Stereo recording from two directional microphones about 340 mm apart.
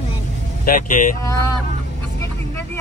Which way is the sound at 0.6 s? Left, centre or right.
Left.